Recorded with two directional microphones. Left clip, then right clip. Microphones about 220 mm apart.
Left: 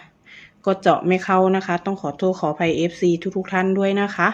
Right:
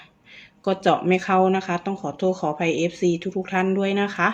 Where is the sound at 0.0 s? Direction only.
10° left (ahead or behind).